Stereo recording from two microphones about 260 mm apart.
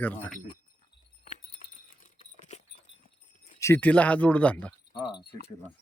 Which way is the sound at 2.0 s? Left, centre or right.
Left.